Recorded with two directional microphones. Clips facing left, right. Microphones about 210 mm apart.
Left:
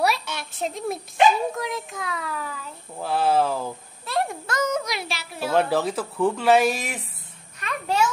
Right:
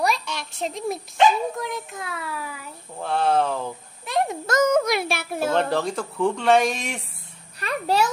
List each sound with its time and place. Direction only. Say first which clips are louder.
0.0 s a sound: even; 5° left (ahead or behind)
1.6 s speech: left 1 dB; centre (ahead or behind)
3.0 s speech: even; 5° left (ahead or behind)
4.0 s a sound: right 2 dB; 15° right (ahead or behind)
4.5 s speech: right 6 dB; 50° right (ahead or behind)
5.5 s speech: left 2 dB; 5° left (ahead or behind)
7.6 s a child's voice: right 2 dB; 35° right (ahead or behind)